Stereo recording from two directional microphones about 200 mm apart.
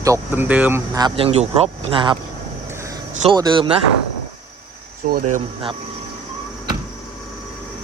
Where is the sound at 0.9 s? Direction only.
25° right (ahead or behind).